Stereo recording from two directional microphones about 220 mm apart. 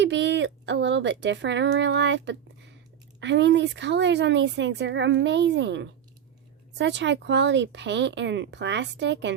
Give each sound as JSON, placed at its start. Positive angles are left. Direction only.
{"t": 0.0, "sound": "speech", "side_deg": -55}